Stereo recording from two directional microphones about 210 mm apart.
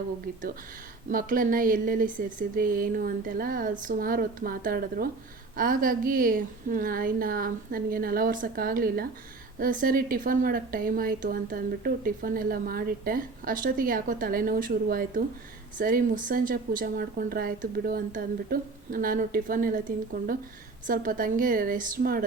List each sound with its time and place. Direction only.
0.3 s a woman's voice: 40° right (ahead or behind)
20.8 s speech: 40° right (ahead or behind)